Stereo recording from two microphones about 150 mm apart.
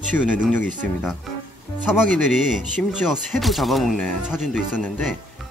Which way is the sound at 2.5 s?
5° right (ahead or behind).